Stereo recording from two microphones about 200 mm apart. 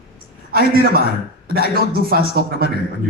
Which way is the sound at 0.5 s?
50° right (ahead or behind).